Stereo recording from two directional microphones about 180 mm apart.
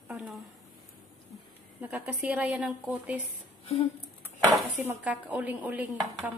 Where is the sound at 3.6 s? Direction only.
35° left (ahead or behind).